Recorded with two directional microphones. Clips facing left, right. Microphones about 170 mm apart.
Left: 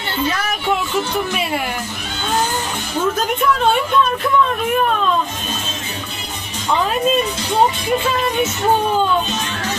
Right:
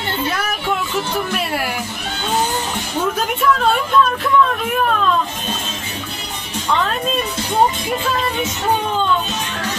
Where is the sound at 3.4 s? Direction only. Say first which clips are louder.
Even; centre (ahead or behind).